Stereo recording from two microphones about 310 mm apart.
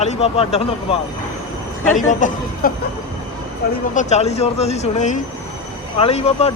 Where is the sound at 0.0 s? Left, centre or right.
Centre.